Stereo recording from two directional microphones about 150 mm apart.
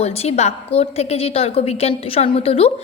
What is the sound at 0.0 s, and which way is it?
A woman's voice, 45° left (ahead or behind).